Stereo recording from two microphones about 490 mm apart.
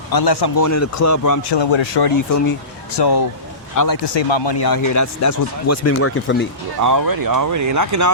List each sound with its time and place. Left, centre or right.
0.1 s speech: left
1.5 s speech: left
2.0 s speech: left
4.0 s speech: left
4.7 s speech: left
6.8 s speech: right